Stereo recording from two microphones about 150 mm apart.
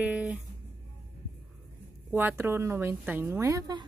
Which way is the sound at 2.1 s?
15° right (ahead or behind).